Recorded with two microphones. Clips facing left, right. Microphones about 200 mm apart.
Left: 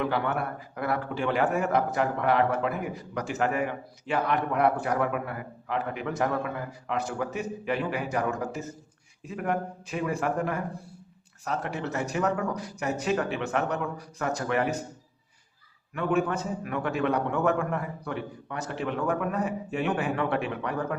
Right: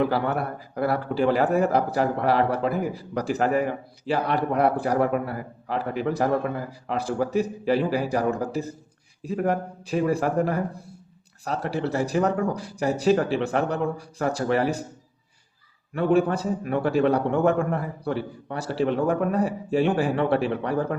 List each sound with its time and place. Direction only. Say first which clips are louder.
0.0 s a man's voice: right 4 dB; 35° right (ahead or behind)
16.0 s a man's voice: right 5 dB; 35° right (ahead or behind)